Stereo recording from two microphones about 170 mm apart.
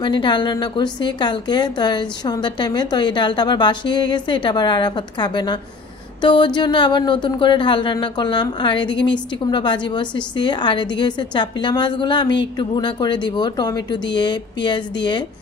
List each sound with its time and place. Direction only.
0.0 s speech: 25° left (ahead or behind)